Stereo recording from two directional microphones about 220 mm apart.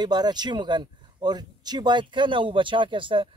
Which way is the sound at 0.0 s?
20° right (ahead or behind).